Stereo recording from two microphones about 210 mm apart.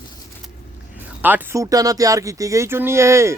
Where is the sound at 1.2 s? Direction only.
10° right (ahead or behind).